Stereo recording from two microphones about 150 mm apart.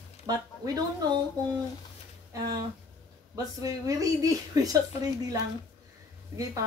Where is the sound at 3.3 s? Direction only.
25° right (ahead or behind).